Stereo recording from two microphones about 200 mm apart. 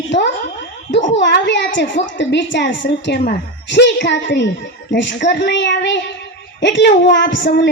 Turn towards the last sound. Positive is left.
turn(degrees=65)  # may be behind; listen again after turning